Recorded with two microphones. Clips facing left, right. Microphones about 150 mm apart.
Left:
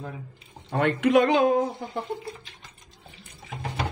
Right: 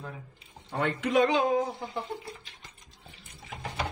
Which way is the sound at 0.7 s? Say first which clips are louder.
Left 7 dB; 70° left (ahead or behind).